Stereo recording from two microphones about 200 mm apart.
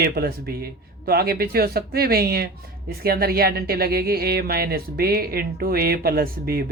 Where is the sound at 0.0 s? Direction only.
50° right (ahead or behind).